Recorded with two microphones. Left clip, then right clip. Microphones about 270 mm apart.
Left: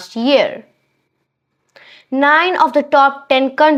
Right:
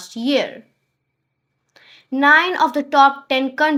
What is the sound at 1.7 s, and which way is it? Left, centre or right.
Speech, left.